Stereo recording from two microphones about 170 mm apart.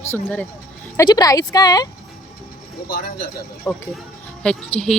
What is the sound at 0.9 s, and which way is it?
Speech, 25° left (ahead or behind).